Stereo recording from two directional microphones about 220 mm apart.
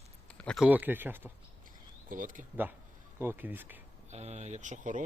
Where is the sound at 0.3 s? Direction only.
5° left (ahead or behind).